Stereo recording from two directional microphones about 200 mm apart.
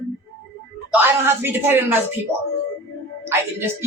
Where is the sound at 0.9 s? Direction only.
10° right (ahead or behind).